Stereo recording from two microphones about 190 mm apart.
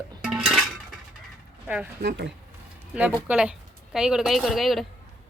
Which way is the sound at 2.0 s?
65° right (ahead or behind).